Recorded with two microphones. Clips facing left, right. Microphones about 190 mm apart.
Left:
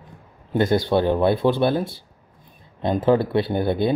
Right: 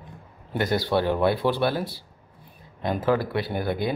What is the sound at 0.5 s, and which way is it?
Speech, 25° left (ahead or behind).